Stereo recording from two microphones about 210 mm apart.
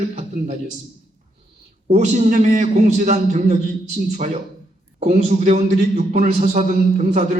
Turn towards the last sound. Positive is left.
turn(degrees=-30)  # may be behind; listen again after turning